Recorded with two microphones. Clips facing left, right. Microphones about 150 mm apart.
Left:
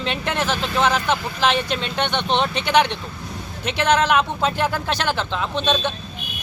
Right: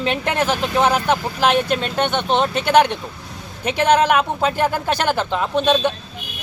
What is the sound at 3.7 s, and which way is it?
Speech, 50° right (ahead or behind).